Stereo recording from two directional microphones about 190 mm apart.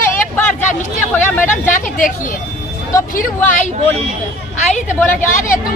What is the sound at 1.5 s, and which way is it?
Speech, 45° left (ahead or behind).